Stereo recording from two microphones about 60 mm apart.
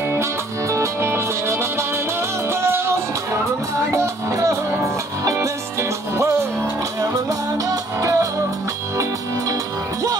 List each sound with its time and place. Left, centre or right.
0.1 s music: right
3.9 s music: right
7.0 s music: right